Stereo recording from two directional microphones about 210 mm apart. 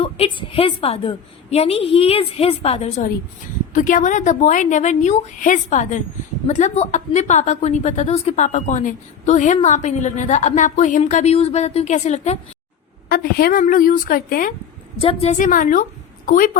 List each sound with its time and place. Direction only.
0.0 s a woman's voice: 25° left (ahead or behind)
13.1 s a woman's voice: 45° left (ahead or behind)
14.9 s a woman's voice: 30° left (ahead or behind)